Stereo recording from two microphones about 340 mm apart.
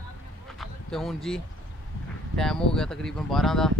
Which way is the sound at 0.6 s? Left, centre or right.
Centre.